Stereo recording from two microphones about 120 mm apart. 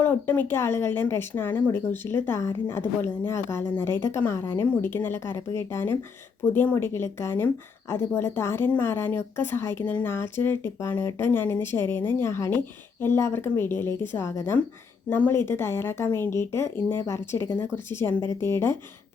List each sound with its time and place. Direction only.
0.0 s a woman's voice: 15° left (ahead or behind)